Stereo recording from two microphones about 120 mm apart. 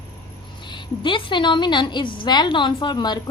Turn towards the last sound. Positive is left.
turn(degrees=35)  # may be behind; listen again after turning